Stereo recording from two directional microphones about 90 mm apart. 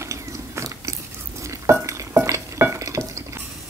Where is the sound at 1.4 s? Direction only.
35° right (ahead or behind).